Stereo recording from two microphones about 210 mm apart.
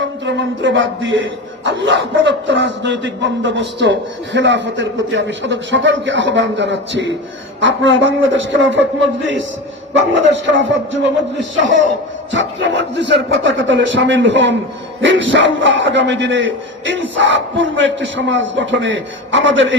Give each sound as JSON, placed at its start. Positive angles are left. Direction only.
{"t": 0.0, "sound": "speech", "side_deg": -60}
{"t": 12.3, "sound": "speech", "side_deg": -60}